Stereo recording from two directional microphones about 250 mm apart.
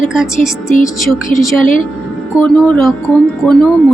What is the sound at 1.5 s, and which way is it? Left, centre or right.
Speech, left.